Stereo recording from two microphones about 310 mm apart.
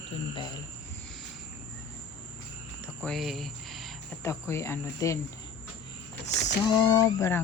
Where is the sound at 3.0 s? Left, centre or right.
Centre.